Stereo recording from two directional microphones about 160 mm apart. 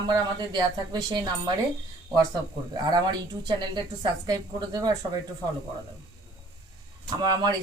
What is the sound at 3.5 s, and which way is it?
Speech, 30° right (ahead or behind).